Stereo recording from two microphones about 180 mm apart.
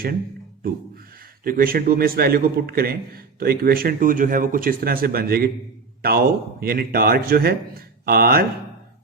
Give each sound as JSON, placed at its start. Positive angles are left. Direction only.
{"t": 1.5, "sound": "a man's voice", "side_deg": -55}